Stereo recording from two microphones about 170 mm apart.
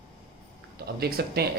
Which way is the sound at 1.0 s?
65° right (ahead or behind).